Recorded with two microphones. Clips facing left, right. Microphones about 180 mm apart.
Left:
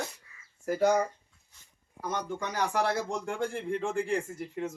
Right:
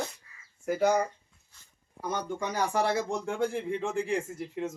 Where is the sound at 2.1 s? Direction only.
Centre (ahead or behind).